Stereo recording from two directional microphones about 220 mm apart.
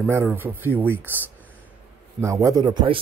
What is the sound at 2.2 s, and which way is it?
Speech, 15° right (ahead or behind).